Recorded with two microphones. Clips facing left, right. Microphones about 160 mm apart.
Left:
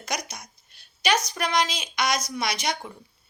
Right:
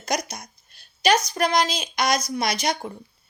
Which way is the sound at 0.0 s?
40° right (ahead or behind).